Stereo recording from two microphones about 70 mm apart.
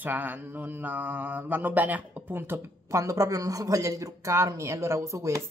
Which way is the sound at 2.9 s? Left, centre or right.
Right.